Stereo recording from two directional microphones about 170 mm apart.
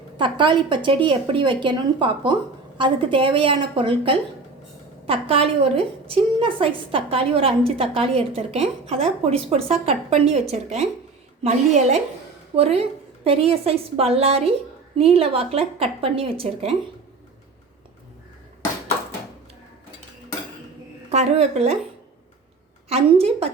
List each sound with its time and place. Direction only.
0.2 s a woman's voice: 30° right (ahead or behind)
21.1 s a woman's voice: 40° right (ahead or behind)
22.9 s a woman's voice: 35° right (ahead or behind)